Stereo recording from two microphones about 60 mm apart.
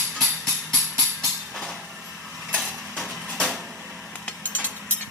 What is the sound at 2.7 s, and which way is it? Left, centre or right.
Cutlery, centre.